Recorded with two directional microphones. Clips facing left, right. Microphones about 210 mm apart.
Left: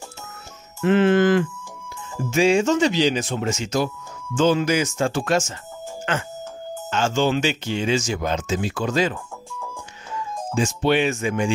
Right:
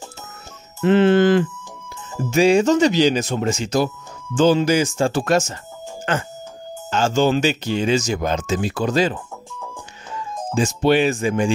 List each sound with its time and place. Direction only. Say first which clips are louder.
0.7 s speech: right 2 dB; 30° right (ahead or behind)